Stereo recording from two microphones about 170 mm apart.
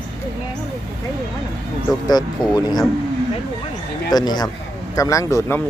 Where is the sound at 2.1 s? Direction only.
25° left (ahead or behind).